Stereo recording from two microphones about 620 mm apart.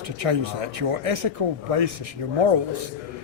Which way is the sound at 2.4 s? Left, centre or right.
Right.